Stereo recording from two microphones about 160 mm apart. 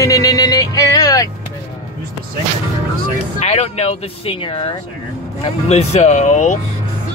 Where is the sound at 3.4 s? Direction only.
40° left (ahead or behind).